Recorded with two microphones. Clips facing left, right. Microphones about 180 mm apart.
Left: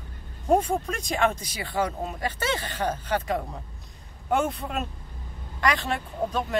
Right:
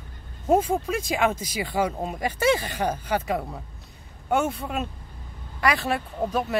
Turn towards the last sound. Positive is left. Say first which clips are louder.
# right 2 dB
turn(degrees=-5)  # may be behind; listen again after turning